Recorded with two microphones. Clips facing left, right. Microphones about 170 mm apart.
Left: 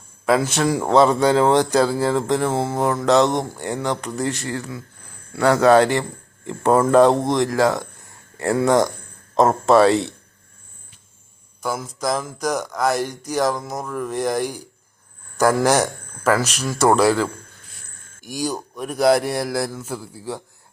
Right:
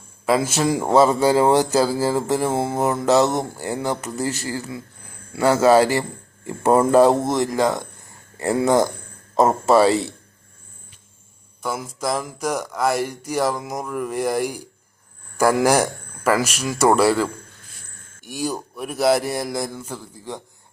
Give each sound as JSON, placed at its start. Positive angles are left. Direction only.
{"t": 0.3, "sound": "speech", "side_deg": -5}
{"t": 11.6, "sound": "speech", "side_deg": -5}